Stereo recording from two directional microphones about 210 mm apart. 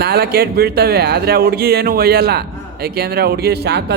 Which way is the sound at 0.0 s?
50° right (ahead or behind).